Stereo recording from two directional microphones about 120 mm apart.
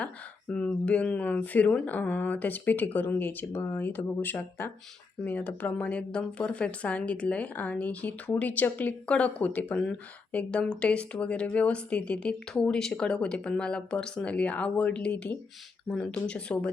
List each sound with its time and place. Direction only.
0.0 s speech: 10° left (ahead or behind)